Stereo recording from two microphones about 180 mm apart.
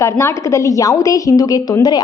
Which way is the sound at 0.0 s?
15° left (ahead or behind).